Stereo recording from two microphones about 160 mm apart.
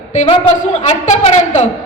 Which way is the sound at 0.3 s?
45° left (ahead or behind).